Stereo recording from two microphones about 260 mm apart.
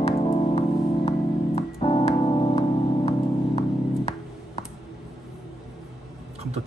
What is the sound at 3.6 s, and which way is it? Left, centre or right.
Music, left.